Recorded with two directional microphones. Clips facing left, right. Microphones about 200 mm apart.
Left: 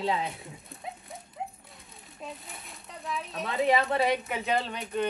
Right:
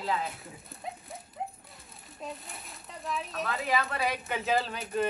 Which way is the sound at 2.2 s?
Centre (ahead or behind).